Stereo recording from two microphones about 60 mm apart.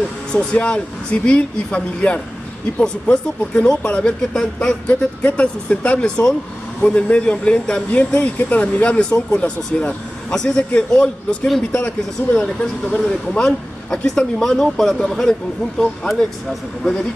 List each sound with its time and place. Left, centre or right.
0.3 s speech: centre
7.9 s speech: left; by 16.3 s centre